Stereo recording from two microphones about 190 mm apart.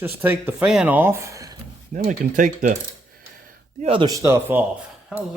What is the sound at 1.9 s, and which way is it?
Speech, 45° right (ahead or behind).